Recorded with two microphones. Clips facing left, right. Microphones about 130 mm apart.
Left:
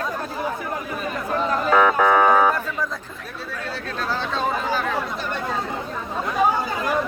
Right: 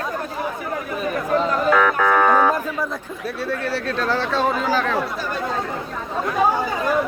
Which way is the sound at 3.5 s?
70° right (ahead or behind).